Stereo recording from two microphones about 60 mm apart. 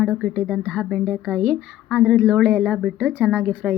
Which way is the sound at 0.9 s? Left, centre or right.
Centre.